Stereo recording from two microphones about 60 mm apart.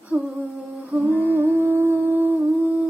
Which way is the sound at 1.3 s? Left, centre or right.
Right.